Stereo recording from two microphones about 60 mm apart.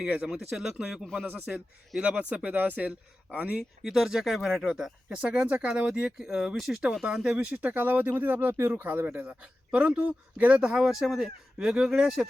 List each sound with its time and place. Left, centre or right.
0.0 s speech: right
0.3 s speech: centre
3.8 s speech: centre
7.3 s speech: right; by 12.3 s centre